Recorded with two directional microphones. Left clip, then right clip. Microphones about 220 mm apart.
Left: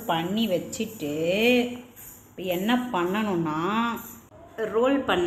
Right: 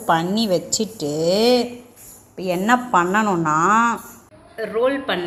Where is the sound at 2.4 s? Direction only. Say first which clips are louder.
Right 8 dB; 15° right (ahead or behind).